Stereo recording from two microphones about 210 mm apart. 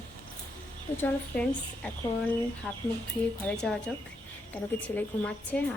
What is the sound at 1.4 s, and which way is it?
A woman's voice, 5° left (ahead or behind).